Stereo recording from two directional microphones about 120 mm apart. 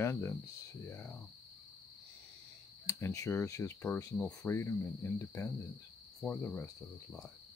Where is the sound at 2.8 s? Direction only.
30° left (ahead or behind).